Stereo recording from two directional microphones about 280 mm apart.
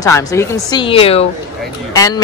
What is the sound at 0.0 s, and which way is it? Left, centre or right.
A woman's voice, centre.